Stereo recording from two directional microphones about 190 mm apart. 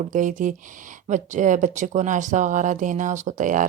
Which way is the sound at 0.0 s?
40° right (ahead or behind).